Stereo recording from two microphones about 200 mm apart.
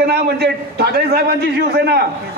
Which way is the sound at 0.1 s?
55° right (ahead or behind).